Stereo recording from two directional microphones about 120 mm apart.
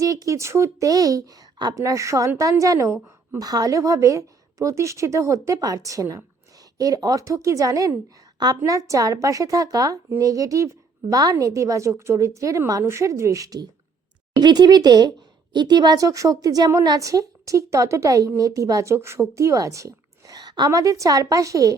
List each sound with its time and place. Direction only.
0.0 s speech: 30° right (ahead or behind)